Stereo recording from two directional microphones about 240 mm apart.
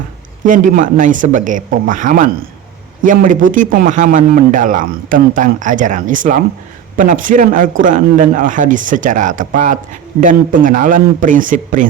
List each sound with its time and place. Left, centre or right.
0.4 s a man's voice: right